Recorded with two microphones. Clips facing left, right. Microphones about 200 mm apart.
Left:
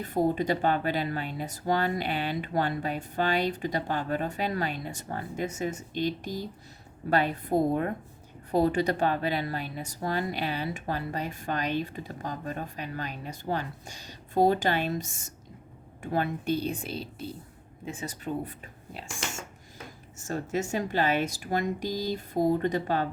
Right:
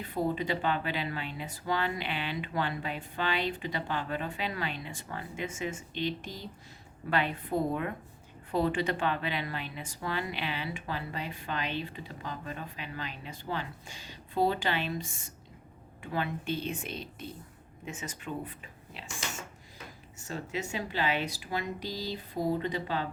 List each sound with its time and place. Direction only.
0.0 s speech: 45° left (ahead or behind)
20.1 s speech: 45° left (ahead or behind)